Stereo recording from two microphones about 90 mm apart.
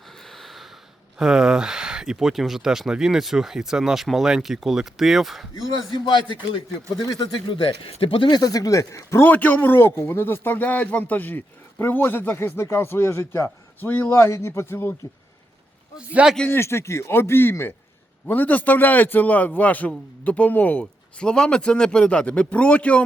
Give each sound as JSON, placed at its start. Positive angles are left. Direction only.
{"t": 0.3, "sound": "snort", "side_deg": 0}
{"t": 1.2, "sound": "speech", "side_deg": -5}
{"t": 6.1, "sound": "speech", "side_deg": 60}
{"t": 6.9, "sound": "speech", "side_deg": 45}
{"t": 7.4, "sound": "speech", "side_deg": 75}
{"t": 8.3, "sound": "speech", "side_deg": 45}
{"t": 9.2, "sound": "speech", "side_deg": 20}
{"t": 14.1, "sound": "speech", "side_deg": 30}
{"t": 16.0, "sound": "speech", "side_deg": -10}
{"t": 16.5, "sound": "a man's voice", "side_deg": 30}